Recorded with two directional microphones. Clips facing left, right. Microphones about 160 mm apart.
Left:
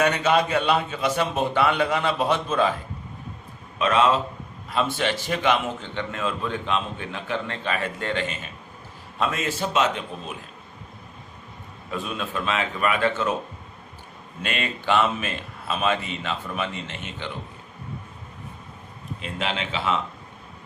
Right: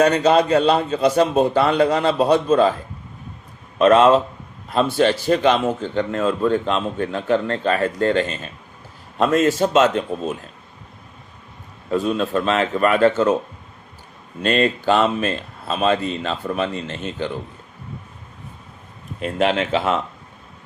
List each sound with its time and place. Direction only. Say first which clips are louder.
0.0 s a man's voice: right 6 dB; 35° right (ahead or behind)
3.8 s a man's voice: right 8 dB; 45° right (ahead or behind)
11.9 s a man's voice: right 10 dB; 35° right (ahead or behind)
14.4 s a man's voice: right 9 dB; 40° right (ahead or behind)
19.2 s speech: right 10 dB; 50° right (ahead or behind)